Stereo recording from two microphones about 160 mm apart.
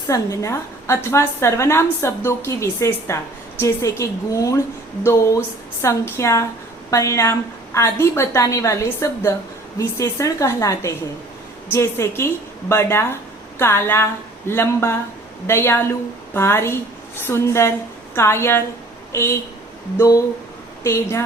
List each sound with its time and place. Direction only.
0.1 s a woman's voice: 20° left (ahead or behind)
20.8 s a woman's voice: 20° left (ahead or behind)